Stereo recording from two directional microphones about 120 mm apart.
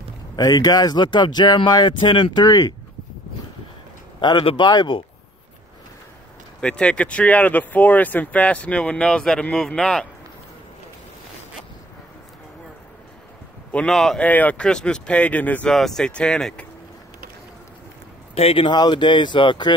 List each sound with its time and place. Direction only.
0.4 s speech: 30° left (ahead or behind)
4.2 s speech: 40° left (ahead or behind)
6.6 s speech: 10° left (ahead or behind)
13.7 s speech: 10° left (ahead or behind)
18.3 s speech: 55° left (ahead or behind)